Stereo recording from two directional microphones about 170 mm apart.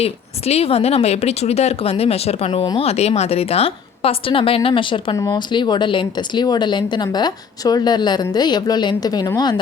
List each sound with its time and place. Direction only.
0.0 s speech: 35° left (ahead or behind)